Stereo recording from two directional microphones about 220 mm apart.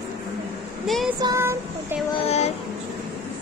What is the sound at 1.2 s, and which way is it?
Child singing, 15° right (ahead or behind).